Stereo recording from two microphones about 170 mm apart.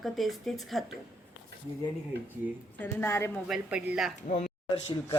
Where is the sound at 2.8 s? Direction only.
15° left (ahead or behind).